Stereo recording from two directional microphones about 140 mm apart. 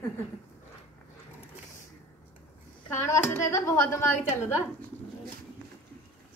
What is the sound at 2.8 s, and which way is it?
A woman's voice, 20° left (ahead or behind).